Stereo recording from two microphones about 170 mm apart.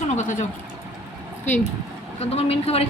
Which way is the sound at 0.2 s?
45° left (ahead or behind).